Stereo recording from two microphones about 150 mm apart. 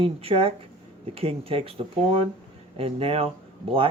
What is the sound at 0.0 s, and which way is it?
Speech, 40° right (ahead or behind).